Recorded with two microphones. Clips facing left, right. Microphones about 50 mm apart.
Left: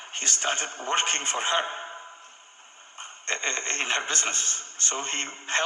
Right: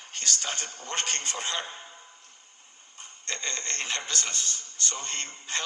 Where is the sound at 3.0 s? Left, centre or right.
Left.